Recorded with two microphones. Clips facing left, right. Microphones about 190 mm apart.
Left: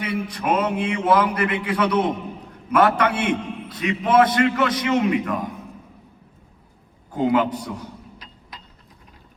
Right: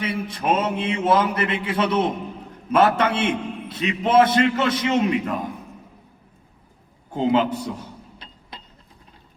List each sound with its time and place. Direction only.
0.0 s a man's voice: 25° right (ahead or behind)
7.1 s a man's voice: 25° right (ahead or behind)
8.2 s a sound: 30° right (ahead or behind)